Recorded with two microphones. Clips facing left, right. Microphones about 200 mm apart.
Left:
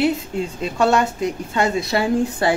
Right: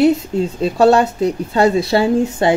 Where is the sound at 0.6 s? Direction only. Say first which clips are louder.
Right 6 dB; 35° right (ahead or behind).